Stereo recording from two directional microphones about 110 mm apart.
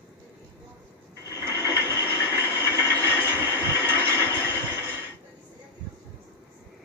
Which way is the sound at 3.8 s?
20° right (ahead or behind).